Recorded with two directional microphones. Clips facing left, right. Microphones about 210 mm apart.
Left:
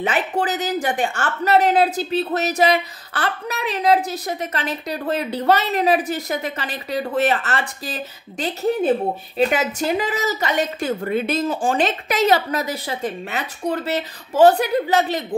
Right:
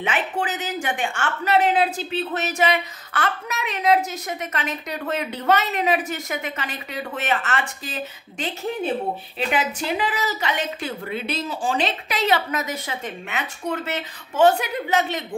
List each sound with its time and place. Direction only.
0.0 s a woman's voice: 40° left (ahead or behind)